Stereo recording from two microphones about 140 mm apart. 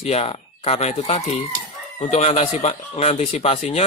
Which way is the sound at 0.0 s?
50° left (ahead or behind).